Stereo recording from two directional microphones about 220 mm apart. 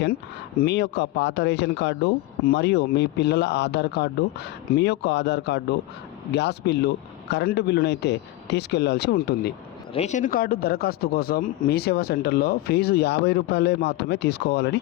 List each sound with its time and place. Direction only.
0.6 s speech: 50° left (ahead or behind)
9.9 s speech: 30° left (ahead or behind); by 14.8 s 50° left (ahead or behind)